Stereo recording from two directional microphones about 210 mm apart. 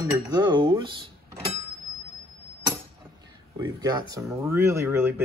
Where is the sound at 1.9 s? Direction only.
Centre (ahead or behind).